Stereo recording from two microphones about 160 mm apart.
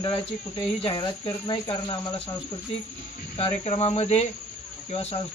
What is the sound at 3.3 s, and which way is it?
Speech, 40° left (ahead or behind).